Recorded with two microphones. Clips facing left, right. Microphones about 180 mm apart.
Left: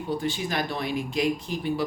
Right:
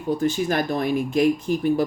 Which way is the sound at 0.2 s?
45° right (ahead or behind).